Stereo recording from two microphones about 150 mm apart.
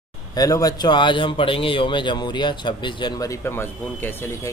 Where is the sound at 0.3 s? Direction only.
25° left (ahead or behind).